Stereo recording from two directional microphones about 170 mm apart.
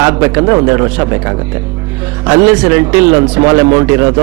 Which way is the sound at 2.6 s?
15° right (ahead or behind).